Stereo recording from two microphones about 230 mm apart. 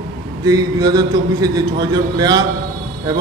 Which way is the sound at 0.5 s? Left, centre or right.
Centre.